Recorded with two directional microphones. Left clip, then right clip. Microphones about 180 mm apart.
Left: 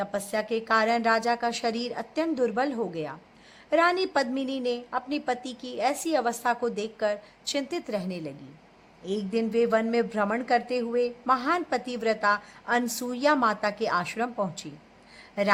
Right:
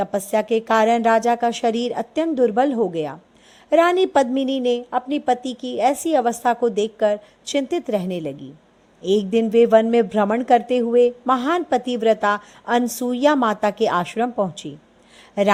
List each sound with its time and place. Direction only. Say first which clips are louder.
0.0 s a woman's voice: right 8 dB; 35° right (ahead or behind)
9.3 s a woman's voice: right 9 dB; 35° right (ahead or behind)